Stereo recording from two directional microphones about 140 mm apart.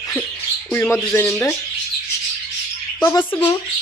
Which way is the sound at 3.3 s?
15° left (ahead or behind).